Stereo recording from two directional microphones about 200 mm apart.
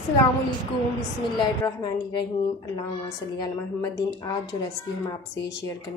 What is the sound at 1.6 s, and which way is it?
Speech, 20° left (ahead or behind).